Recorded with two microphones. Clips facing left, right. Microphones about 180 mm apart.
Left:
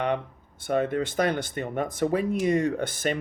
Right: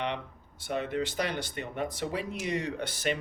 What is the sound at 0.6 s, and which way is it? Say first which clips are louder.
Speech: left 6 dB; 50° left (ahead or behind).